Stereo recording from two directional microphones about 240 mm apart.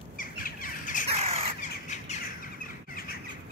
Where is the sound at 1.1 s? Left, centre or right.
Right.